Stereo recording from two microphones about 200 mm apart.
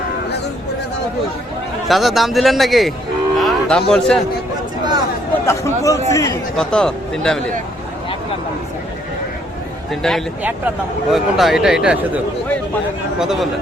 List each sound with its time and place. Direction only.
1.9 s speech: centre (ahead or behind)
3.3 s music: centre (ahead or behind)
4.8 s a sound: 20° right (ahead or behind)
5.5 s chatter: 15° left (ahead or behind)
6.6 s speech: 5° left (ahead or behind)
9.9 s speech: centre (ahead or behind)